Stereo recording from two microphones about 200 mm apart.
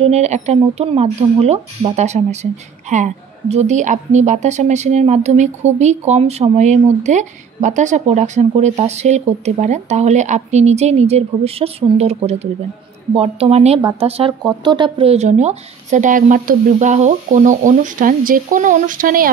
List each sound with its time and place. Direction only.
0.0 s a woman's voice: 35° right (ahead or behind)